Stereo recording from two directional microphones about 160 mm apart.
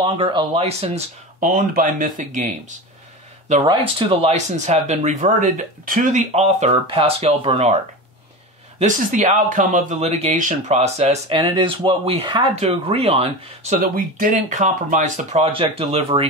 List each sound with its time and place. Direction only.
0.0 s speech: 30° right (ahead or behind)
1.4 s speech: 60° right (ahead or behind)
3.6 s speech: 35° right (ahead or behind)
8.7 s speech: 50° right (ahead or behind)
13.7 s speech: 65° right (ahead or behind); by 16.3 s 40° right (ahead or behind)